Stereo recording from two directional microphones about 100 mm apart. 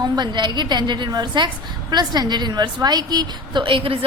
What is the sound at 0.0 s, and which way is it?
A woman's voice, 45° right (ahead or behind).